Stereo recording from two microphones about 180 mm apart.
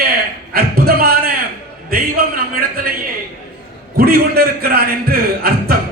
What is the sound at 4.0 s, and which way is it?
A man's voice, 60° right (ahead or behind).